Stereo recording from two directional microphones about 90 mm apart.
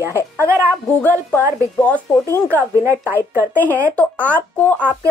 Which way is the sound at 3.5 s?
20° left (ahead or behind).